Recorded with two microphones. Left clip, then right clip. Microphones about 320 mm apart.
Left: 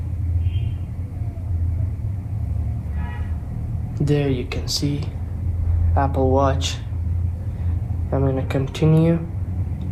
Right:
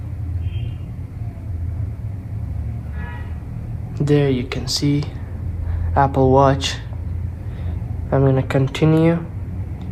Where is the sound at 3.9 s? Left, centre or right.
Right.